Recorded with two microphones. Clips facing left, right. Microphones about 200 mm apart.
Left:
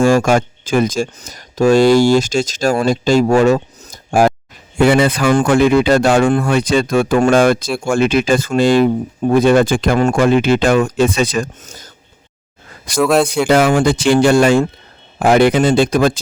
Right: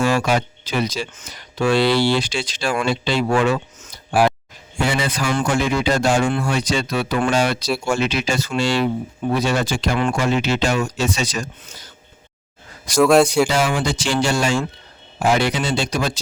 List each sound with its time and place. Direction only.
0.0 s speech: 45° left (ahead or behind)
4.8 s speech: 60° left (ahead or behind)
13.0 s speech: centre (ahead or behind)
13.5 s speech: 55° left (ahead or behind)